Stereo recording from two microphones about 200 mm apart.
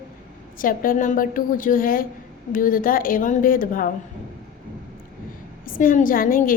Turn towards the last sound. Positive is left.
turn(degrees=45)  # may be behind; listen again after turning